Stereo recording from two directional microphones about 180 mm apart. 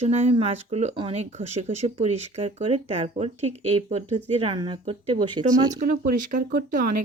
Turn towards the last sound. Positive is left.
turn(degrees=-50)  # may be behind; listen again after turning